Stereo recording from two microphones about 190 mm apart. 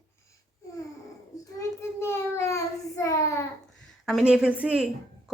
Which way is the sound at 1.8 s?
15° left (ahead or behind).